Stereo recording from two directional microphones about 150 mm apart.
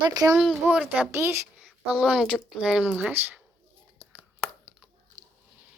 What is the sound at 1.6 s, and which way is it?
Speech, centre (ahead or behind).